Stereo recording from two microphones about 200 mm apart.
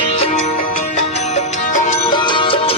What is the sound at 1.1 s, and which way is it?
Music, 35° left (ahead or behind).